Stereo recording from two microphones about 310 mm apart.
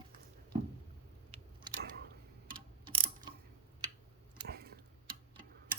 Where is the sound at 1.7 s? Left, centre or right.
Centre.